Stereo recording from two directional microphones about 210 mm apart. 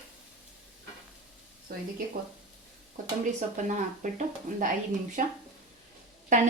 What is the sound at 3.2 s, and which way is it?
Speech, 35° right (ahead or behind).